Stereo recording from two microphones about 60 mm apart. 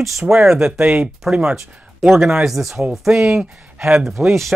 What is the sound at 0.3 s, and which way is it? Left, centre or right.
Speech, centre.